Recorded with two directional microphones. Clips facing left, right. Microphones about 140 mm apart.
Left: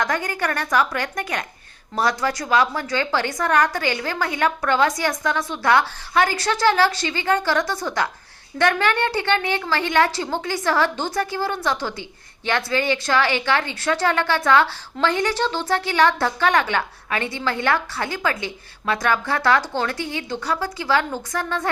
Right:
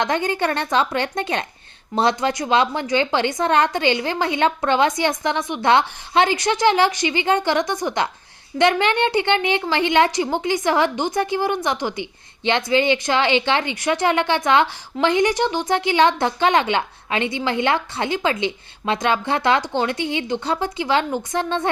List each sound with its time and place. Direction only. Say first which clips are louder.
0.0 s speech: right 3 dB; 25° right (ahead or behind)